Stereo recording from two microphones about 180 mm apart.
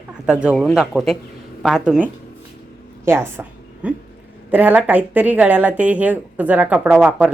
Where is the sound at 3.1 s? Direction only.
15° right (ahead or behind).